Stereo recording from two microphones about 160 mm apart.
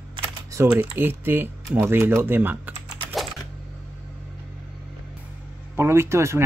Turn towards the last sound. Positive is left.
turn(degrees=-15)  # may be behind; listen again after turning